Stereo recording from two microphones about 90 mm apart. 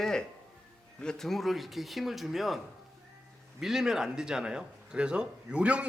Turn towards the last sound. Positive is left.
turn(degrees=-15)  # may be behind; listen again after turning